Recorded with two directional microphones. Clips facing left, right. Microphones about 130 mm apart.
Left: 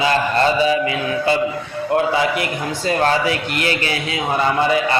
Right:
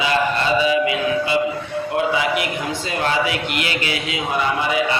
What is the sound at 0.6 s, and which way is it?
Mantra, 40° left (ahead or behind).